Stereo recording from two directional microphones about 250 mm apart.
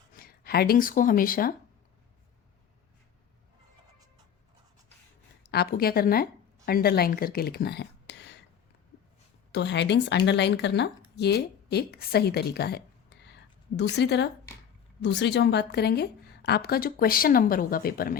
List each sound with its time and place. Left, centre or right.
0.2 s speech: left
5.4 s speech: left
9.5 s speech: left
13.9 s a woman's voice: left